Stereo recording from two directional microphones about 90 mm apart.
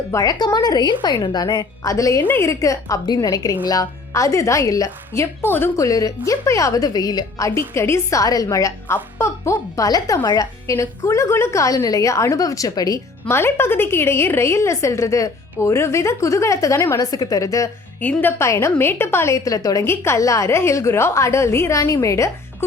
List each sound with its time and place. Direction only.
0.2 s a woman's voice: 50° left (ahead or behind); by 5.7 s 25° left (ahead or behind)
5.7 s a woman's voice: 40° left (ahead or behind)
13.2 s a woman's voice: 30° left (ahead or behind)
17.1 s a woman's voice: 45° left (ahead or behind)
18.0 s a woman's voice: 20° left (ahead or behind); by 19.8 s 40° left (ahead or behind)
19.8 s a woman's voice: 30° left (ahead or behind)